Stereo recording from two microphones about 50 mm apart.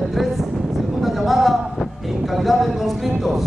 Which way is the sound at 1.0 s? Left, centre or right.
Centre.